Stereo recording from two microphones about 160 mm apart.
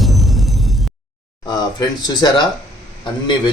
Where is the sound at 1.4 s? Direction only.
25° left (ahead or behind).